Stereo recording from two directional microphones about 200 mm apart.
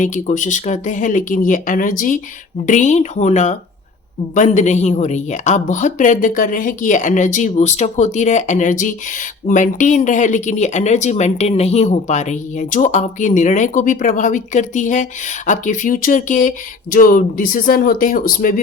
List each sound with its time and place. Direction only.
0.0 s speech: 40° left (ahead or behind)